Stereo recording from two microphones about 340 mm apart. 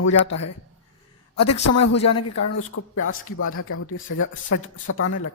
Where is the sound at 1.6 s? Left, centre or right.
Left.